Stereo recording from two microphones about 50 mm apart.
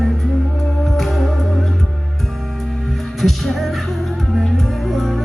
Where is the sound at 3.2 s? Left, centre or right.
Centre.